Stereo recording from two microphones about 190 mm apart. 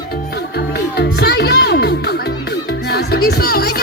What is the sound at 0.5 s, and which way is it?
Music, 60° left (ahead or behind).